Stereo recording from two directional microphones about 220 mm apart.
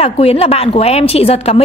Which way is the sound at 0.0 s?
25° left (ahead or behind).